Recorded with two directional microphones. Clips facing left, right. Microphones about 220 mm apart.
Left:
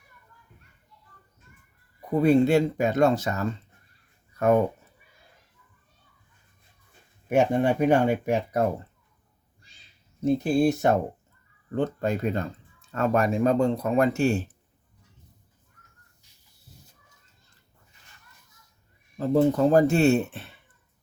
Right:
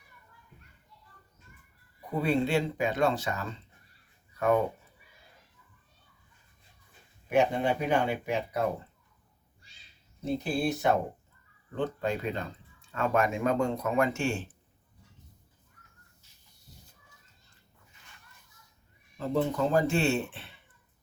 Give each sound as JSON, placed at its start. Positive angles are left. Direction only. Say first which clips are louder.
{"t": 2.2, "sound": "speech", "louder": "left 8 dB", "side_deg": 45}
{"t": 7.3, "sound": "speech", "louder": "left 4 dB", "side_deg": 45}
{"t": 10.2, "sound": "speech", "louder": "left 8 dB", "side_deg": 45}
{"t": 19.1, "sound": "speech", "louder": "left 8 dB", "side_deg": 40}